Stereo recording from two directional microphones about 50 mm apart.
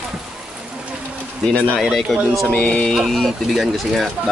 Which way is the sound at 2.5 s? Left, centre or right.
Left.